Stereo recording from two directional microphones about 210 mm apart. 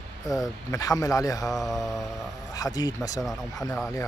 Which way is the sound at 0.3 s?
15° left (ahead or behind).